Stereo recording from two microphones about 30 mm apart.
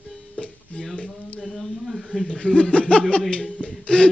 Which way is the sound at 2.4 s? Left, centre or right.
Left.